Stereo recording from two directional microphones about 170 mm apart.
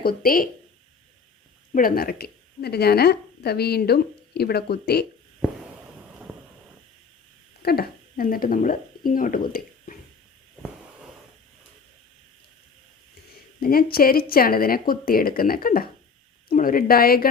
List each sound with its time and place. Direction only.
0.0 s speech: 60° left (ahead or behind)
1.7 s a woman's voice: 60° left (ahead or behind)
7.6 s speech: 65° left (ahead or behind)
13.6 s speech: 60° left (ahead or behind)